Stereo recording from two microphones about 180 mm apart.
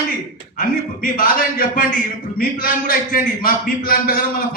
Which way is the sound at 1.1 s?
50° left (ahead or behind).